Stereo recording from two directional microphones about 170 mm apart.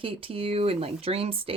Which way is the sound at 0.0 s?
30° right (ahead or behind).